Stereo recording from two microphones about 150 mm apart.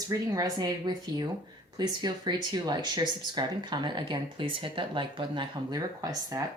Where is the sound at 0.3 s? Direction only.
25° right (ahead or behind).